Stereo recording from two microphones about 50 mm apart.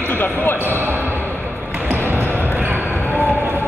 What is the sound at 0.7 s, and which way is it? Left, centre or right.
Basketball bounce, right.